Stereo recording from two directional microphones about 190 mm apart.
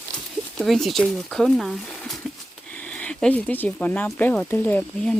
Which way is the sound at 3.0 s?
5° left (ahead or behind).